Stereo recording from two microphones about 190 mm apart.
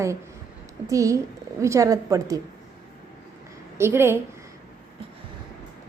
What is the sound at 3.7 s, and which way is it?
Speech, 15° right (ahead or behind).